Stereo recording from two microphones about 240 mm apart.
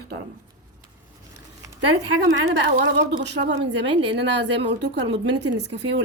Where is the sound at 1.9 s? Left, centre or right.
Right.